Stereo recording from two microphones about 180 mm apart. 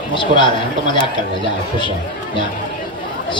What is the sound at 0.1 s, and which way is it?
Speech, 25° left (ahead or behind).